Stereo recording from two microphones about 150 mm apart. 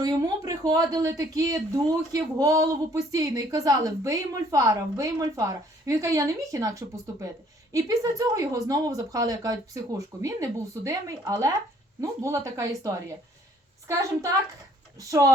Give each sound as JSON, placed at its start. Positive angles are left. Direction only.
{"t": 0.0, "sound": "speech", "side_deg": -25}